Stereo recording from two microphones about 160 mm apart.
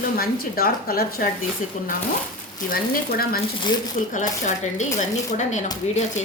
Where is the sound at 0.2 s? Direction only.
70° left (ahead or behind).